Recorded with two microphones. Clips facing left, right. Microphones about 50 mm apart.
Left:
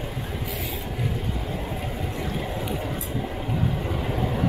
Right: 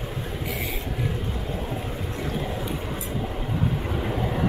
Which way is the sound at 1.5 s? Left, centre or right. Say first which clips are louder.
Even; centre.